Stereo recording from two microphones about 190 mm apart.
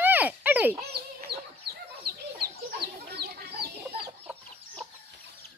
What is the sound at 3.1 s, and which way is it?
Chicken, 55° right (ahead or behind).